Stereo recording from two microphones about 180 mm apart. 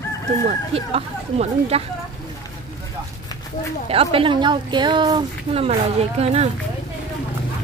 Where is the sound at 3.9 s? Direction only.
30° right (ahead or behind).